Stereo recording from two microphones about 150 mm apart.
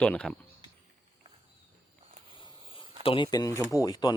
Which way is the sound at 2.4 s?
35° left (ahead or behind).